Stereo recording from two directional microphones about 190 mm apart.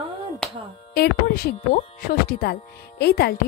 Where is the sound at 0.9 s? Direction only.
55° left (ahead or behind).